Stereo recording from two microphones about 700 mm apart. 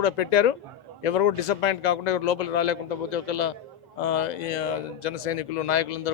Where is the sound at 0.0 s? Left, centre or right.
Left.